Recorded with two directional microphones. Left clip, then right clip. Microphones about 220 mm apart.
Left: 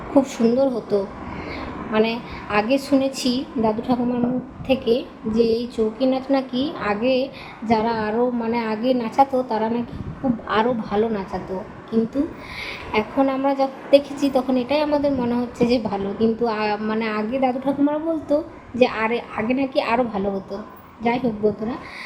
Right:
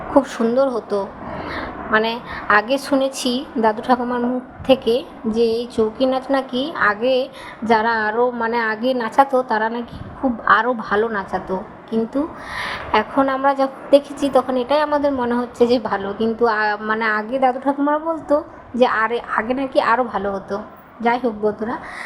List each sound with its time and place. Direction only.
0.1 s a woman's voice: 15° right (ahead or behind)